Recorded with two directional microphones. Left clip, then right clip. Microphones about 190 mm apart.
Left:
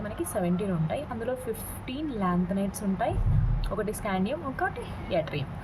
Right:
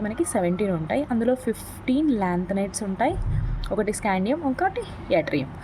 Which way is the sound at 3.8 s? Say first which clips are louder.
Right 6 dB; 30° right (ahead or behind).